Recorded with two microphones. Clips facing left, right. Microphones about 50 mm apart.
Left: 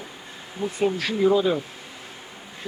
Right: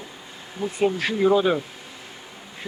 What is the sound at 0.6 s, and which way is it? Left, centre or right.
Speech, centre.